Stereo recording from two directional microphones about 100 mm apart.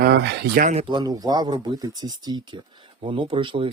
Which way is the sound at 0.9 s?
40° right (ahead or behind).